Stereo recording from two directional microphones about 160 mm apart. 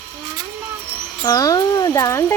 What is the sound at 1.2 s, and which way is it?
Speech, 20° left (ahead or behind).